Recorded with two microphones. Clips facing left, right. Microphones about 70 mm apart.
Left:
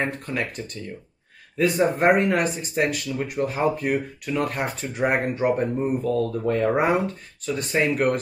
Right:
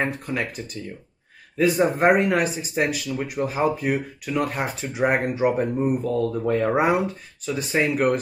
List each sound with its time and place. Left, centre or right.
0.0 s speech: centre